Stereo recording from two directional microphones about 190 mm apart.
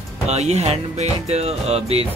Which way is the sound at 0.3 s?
35° right (ahead or behind).